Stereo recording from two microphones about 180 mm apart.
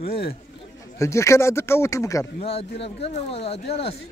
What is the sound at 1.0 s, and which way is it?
Speech, 15° left (ahead or behind).